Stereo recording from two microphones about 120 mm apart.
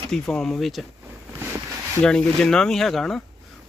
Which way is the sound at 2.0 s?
5° left (ahead or behind).